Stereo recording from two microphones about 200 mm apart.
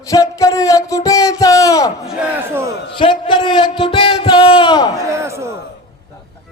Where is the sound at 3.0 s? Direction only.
25° left (ahead or behind).